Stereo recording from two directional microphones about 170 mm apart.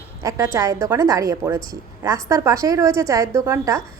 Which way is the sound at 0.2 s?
20° right (ahead or behind).